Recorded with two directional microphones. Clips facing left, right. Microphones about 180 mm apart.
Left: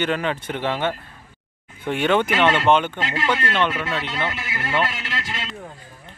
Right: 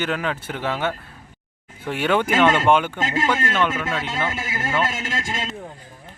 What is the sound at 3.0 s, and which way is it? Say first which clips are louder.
A man's voice: right 1 dB; 45° right (ahead or behind).